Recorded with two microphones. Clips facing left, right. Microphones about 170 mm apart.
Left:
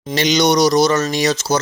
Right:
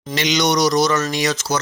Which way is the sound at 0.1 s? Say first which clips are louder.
Left 4 dB; 35° left (ahead or behind).